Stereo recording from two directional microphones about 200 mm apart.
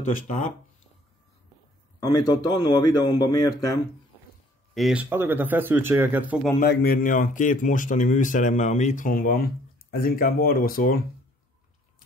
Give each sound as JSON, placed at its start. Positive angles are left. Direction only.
{"t": 0.0, "sound": "speech", "side_deg": 40}
{"t": 2.0, "sound": "a man's voice", "side_deg": 20}
{"t": 4.7, "sound": "speech", "side_deg": -5}
{"t": 6.6, "sound": "speech", "side_deg": 50}